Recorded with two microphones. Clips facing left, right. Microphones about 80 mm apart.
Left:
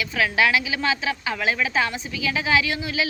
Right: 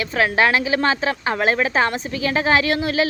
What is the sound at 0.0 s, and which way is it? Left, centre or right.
A woman's voice, right.